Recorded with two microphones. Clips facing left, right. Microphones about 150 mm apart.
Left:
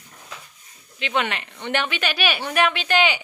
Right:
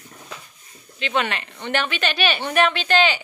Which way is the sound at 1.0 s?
15° left (ahead or behind).